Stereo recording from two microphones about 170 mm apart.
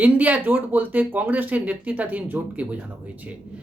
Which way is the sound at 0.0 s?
10° right (ahead or behind).